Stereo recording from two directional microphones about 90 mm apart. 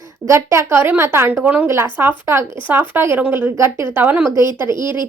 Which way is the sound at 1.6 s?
30° right (ahead or behind).